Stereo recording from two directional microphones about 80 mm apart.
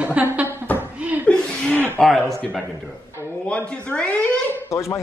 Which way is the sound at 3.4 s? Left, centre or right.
Centre.